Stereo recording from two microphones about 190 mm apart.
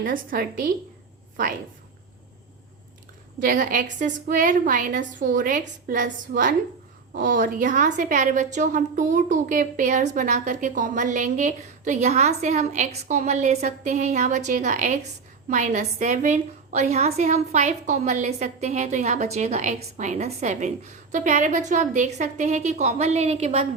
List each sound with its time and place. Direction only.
0.0 s a woman's voice: 45° right (ahead or behind)
3.4 s a woman's voice: 45° right (ahead or behind)
7.1 s a woman's voice: 45° right (ahead or behind)